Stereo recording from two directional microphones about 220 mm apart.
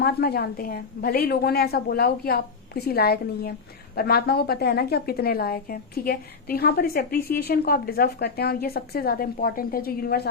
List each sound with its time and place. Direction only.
0.0 s a woman's voice: 45° left (ahead or behind)